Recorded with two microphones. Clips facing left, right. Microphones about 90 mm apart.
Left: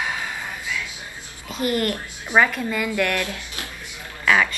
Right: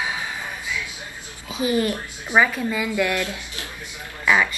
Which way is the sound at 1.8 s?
5° right (ahead or behind).